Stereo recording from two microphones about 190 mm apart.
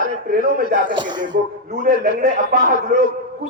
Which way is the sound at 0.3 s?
50° right (ahead or behind).